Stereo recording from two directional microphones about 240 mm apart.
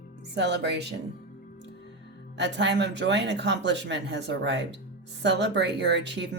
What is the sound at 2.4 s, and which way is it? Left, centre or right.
Speech, right.